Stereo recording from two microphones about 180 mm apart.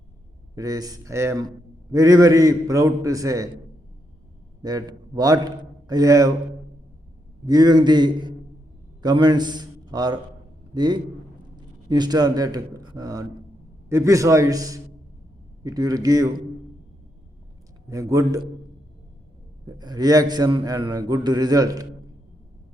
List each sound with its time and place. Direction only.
0.5 s a man's voice: 20° right (ahead or behind)
4.6 s a man's voice: 20° right (ahead or behind)
7.4 s a man's voice: 20° right (ahead or behind)
17.8 s a man's voice: 20° right (ahead or behind)
19.6 s a man's voice: 25° right (ahead or behind)